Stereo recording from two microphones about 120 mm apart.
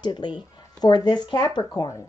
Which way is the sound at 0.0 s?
40° left (ahead or behind).